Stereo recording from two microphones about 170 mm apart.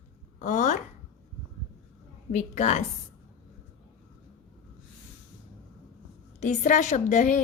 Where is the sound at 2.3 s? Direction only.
45° left (ahead or behind).